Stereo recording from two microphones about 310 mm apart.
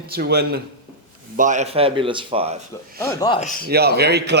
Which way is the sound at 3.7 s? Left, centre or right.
Right.